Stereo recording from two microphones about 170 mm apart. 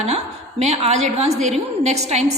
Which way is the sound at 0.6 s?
40° right (ahead or behind).